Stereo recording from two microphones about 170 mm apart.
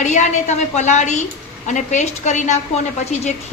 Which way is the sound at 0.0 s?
45° left (ahead or behind).